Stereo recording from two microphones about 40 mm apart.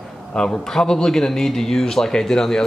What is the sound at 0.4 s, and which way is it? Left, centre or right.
A man's voice, centre.